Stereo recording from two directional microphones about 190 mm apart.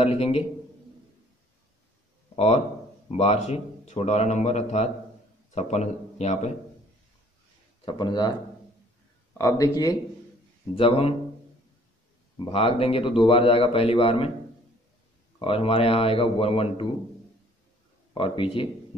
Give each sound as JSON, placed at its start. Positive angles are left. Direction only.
{"t": 0.0, "sound": "speech", "side_deg": 35}
{"t": 2.3, "sound": "speech", "side_deg": 35}
{"t": 7.8, "sound": "a man's voice", "side_deg": 25}
{"t": 9.4, "sound": "speech", "side_deg": 15}
{"t": 10.7, "sound": "speech", "side_deg": 30}
{"t": 12.4, "sound": "a man's voice", "side_deg": 30}
{"t": 15.3, "sound": "a man's voice", "side_deg": 30}
{"t": 18.1, "sound": "a man's voice", "side_deg": 25}